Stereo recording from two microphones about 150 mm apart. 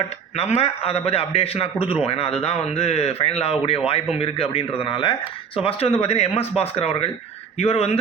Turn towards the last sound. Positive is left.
turn(degrees=45)  # may be behind; listen again after turning